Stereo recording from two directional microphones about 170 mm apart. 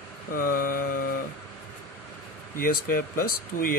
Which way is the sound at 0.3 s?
60° left (ahead or behind).